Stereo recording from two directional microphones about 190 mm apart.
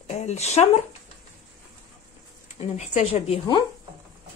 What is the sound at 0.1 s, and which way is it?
Speech, 35° left (ahead or behind).